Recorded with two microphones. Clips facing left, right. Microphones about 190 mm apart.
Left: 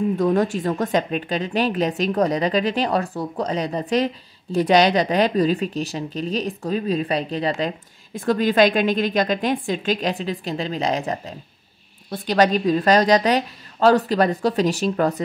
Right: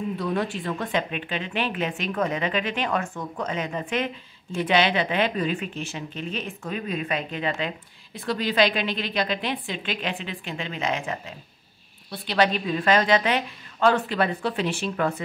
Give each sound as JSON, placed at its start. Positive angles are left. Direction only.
{"t": 0.2, "sound": "speech", "side_deg": 45}